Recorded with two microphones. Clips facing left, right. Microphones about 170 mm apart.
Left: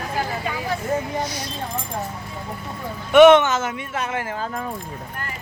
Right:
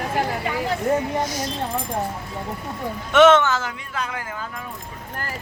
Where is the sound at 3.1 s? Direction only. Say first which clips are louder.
Left 3 dB; 15° left (ahead or behind); by 4.7 s 40° left (ahead or behind).